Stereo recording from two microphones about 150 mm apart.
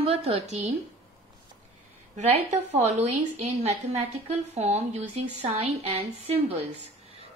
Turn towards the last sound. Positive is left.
turn(degrees=-45)  # may be behind; listen again after turning